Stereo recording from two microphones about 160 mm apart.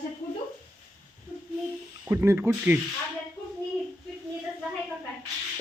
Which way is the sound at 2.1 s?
15° right (ahead or behind).